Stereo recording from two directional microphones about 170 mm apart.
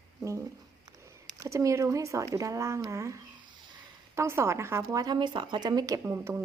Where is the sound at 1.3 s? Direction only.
20° right (ahead or behind).